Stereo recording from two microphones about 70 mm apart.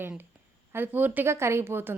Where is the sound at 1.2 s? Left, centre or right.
Right.